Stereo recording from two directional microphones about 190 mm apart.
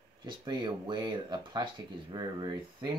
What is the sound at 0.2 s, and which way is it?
Speech, 25° right (ahead or behind).